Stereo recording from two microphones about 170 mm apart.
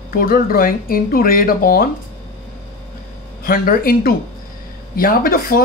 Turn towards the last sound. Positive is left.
turn(degrees=55)  # may be behind; listen again after turning